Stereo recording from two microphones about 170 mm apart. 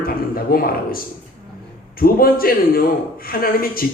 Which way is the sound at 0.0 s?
60° left (ahead or behind).